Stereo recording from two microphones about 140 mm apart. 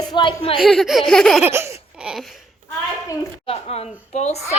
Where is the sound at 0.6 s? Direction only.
Centre (ahead or behind).